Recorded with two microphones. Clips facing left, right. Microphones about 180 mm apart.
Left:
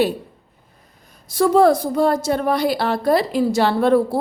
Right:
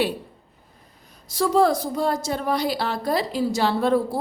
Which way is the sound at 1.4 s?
55° left (ahead or behind).